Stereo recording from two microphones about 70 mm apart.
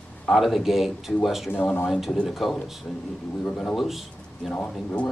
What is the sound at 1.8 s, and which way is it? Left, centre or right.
Speech, centre.